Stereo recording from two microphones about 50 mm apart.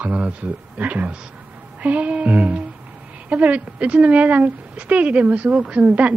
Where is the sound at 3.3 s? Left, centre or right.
Right.